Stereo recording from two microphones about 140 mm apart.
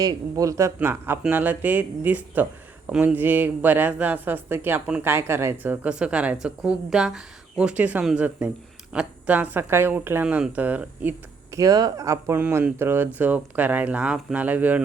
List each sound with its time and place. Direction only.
0.0 s speech: 25° right (ahead or behind)
11.5 s speech: 25° right (ahead or behind)
12.4 s speech: 10° right (ahead or behind)